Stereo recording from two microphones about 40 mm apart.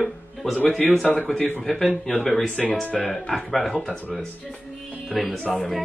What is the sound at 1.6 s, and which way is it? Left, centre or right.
Speech, centre.